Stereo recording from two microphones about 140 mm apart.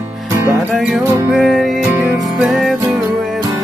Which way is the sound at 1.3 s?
Centre (ahead or behind).